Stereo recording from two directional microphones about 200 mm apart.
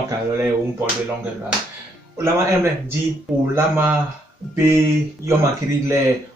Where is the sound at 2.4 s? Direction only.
15° right (ahead or behind).